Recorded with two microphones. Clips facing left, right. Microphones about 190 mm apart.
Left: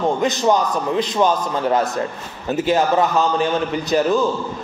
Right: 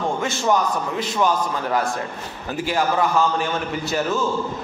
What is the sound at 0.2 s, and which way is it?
A man's voice, 20° left (ahead or behind).